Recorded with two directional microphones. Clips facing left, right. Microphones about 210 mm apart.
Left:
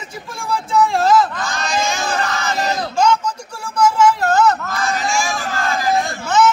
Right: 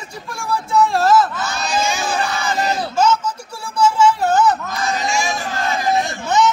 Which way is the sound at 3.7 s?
10° right (ahead or behind).